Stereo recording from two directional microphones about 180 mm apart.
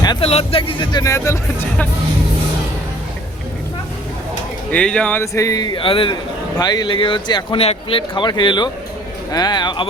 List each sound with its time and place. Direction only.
0.0 s speech: 25° left (ahead or behind)
4.7 s a man's voice: 5° left (ahead or behind); by 9.8 s 25° left (ahead or behind)